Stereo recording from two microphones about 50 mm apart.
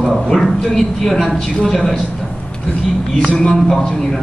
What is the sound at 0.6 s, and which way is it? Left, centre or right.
A man's voice, centre.